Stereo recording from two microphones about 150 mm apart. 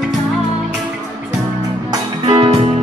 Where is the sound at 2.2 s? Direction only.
40° right (ahead or behind).